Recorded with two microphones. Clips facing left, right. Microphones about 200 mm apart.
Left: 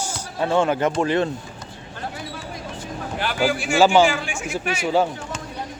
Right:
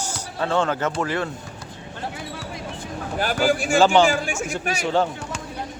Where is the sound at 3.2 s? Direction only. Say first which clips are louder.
Right 2 dB; 45° right (ahead or behind).